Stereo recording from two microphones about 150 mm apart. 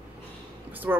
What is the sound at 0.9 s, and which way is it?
Speech, 15° right (ahead or behind).